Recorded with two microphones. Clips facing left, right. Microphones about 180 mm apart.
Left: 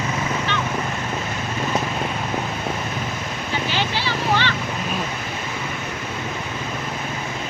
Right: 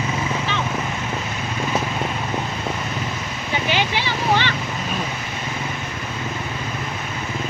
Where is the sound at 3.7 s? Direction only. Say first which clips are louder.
Right 3 dB; 15° right (ahead or behind).